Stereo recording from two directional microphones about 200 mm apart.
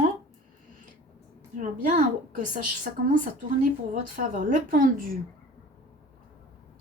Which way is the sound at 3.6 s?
40° right (ahead or behind).